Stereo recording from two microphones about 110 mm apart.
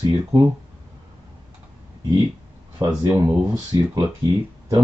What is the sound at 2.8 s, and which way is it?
Speech, 30° right (ahead or behind).